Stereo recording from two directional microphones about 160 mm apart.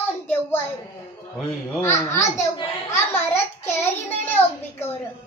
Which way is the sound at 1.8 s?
15° left (ahead or behind).